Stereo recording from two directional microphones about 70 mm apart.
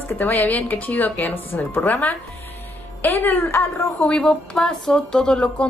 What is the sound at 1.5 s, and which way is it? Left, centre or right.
Speech, left.